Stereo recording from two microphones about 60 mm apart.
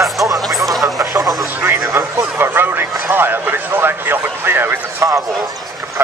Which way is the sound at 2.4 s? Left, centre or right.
Right.